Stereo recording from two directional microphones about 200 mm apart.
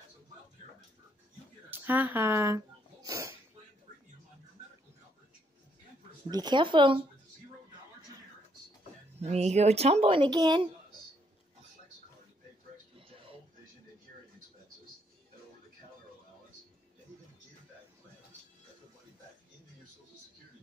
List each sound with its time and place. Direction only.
1.7 s a sound: 10° right (ahead or behind)
6.3 s speech: 20° right (ahead or behind)
9.2 s speech: 35° right (ahead or behind)
12.9 s television: 25° right (ahead or behind)